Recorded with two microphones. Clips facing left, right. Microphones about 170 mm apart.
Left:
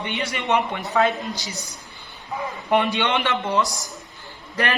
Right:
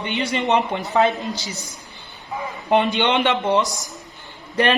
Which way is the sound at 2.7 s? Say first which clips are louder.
Right 3 dB; 20° right (ahead or behind).